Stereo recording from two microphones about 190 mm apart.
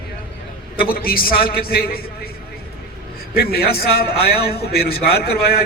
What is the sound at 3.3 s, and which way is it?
A man's voice, 55° left (ahead or behind).